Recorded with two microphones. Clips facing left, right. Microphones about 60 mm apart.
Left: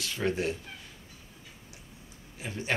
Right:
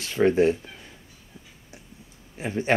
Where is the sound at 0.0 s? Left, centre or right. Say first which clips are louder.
Right 10 dB; right.